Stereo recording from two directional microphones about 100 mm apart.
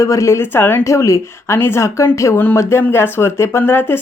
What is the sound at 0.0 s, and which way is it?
A woman's voice, 35° left (ahead or behind).